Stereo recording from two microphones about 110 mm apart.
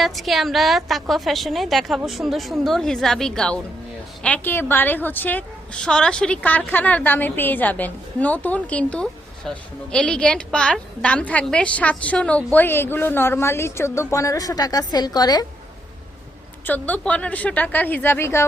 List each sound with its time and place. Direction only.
0.0 s a woman's voice: centre (ahead or behind); by 15.4 s 35° left (ahead or behind)
16.6 s a woman's voice: 15° left (ahead or behind)